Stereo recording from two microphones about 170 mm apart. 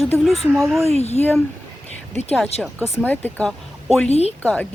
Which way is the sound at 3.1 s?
10° left (ahead or behind).